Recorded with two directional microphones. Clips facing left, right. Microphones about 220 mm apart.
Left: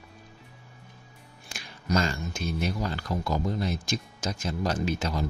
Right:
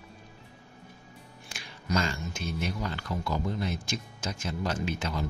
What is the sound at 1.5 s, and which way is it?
Speech, 40° left (ahead or behind).